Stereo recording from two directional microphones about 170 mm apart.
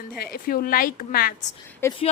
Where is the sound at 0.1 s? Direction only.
65° left (ahead or behind).